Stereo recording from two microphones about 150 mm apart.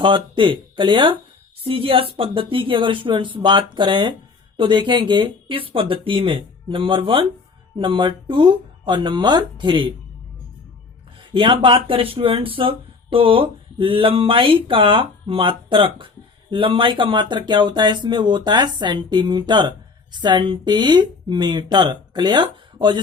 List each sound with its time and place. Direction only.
0.0 s speech: 35° right (ahead or behind)
11.2 s speech: 35° right (ahead or behind)